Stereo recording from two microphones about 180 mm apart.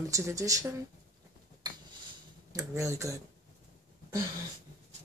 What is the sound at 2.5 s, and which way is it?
Speech, 15° right (ahead or behind).